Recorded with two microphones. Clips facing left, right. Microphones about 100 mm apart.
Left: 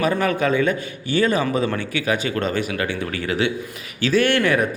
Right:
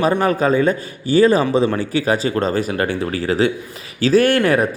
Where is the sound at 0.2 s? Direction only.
35° right (ahead or behind).